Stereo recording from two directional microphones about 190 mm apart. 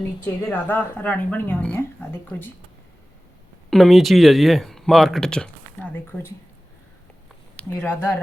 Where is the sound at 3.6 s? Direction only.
Centre (ahead or behind).